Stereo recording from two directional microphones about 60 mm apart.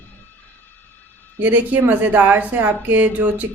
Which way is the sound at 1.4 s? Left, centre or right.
Right.